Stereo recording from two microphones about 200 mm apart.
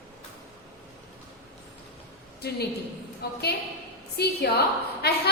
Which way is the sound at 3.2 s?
50° left (ahead or behind).